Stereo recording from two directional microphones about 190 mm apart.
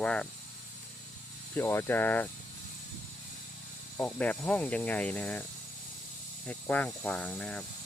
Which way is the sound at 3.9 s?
10° left (ahead or behind).